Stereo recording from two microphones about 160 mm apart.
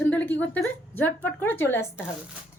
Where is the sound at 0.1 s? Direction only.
10° left (ahead or behind).